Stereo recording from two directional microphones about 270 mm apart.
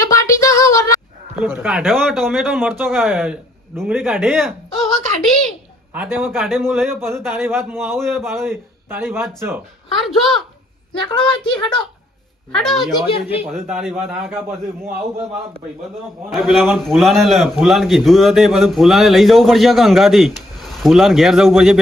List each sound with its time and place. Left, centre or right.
0.0 s a sound: centre
1.5 s a man's voice: centre
5.9 s a man's voice: centre
11.1 s a woman's voice: centre
12.5 s a man's voice: centre
16.3 s a man's voice: centre